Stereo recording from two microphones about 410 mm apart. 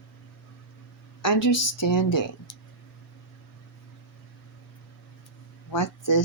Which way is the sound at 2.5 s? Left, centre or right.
Left.